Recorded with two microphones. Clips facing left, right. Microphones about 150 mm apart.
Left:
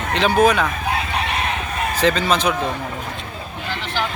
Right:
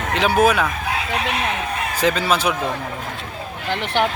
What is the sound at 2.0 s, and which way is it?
Speech, 10° right (ahead or behind).